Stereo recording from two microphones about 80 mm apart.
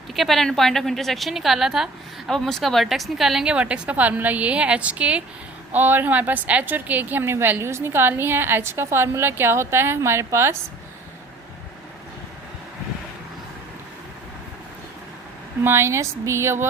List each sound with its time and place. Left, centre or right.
0.1 s a woman's voice: centre; by 10.6 s right
15.6 s speech: right